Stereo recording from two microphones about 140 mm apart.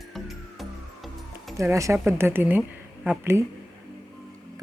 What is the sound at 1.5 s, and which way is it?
Speech, 20° right (ahead or behind).